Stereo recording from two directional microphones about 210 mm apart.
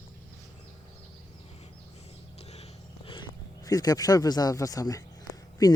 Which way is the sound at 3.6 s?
20° left (ahead or behind).